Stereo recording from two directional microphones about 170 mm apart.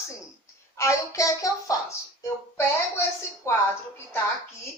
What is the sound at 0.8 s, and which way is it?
Speech, 20° left (ahead or behind).